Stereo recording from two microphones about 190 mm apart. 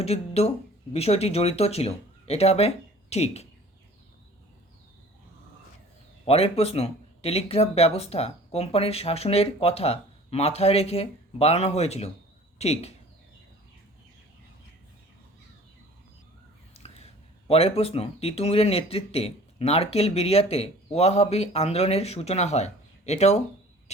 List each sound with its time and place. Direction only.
0.0 s speech: 35° left (ahead or behind)
6.2 s speech: 30° left (ahead or behind)
16.7 s a sound: 35° left (ahead or behind)
17.5 s speech: 30° left (ahead or behind)